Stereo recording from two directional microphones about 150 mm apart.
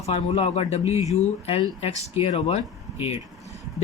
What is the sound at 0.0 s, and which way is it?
Speech, 45° left (ahead or behind).